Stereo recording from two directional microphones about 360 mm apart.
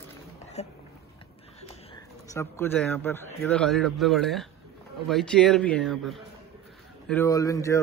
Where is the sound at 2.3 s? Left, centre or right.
Centre.